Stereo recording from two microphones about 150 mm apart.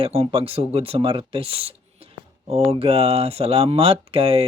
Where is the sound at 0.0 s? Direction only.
40° right (ahead or behind).